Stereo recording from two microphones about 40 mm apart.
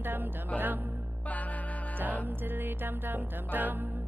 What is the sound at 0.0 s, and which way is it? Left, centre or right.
Music, right.